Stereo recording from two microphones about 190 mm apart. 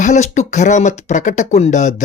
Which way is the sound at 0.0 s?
40° left (ahead or behind).